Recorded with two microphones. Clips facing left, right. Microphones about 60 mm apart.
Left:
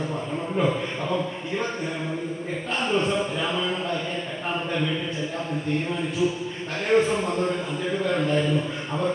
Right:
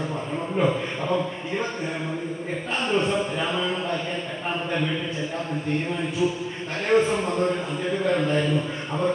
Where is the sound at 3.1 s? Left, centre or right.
Centre.